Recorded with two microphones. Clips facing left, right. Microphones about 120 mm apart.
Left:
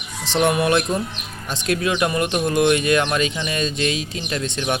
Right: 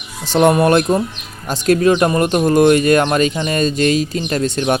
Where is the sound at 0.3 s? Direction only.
45° right (ahead or behind).